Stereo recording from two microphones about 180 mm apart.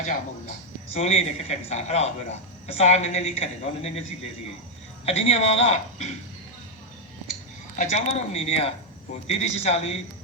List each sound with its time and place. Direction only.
0.9 s a woman's voice: 35° left (ahead or behind)
5.0 s a woman's voice: 35° left (ahead or behind)
7.8 s a woman's voice: 35° left (ahead or behind)